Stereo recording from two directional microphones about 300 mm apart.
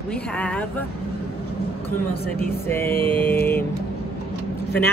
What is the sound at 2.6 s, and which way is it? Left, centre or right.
Mantra, centre.